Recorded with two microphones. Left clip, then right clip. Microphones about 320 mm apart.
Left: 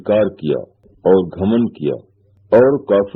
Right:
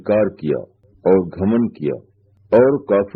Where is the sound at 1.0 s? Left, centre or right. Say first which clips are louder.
Left 2 dB; left.